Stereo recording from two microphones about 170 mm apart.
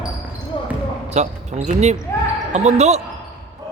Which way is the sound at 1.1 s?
40° right (ahead or behind).